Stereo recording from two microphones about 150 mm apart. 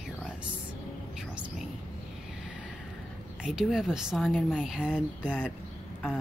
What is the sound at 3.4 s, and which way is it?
Speech, 5° right (ahead or behind).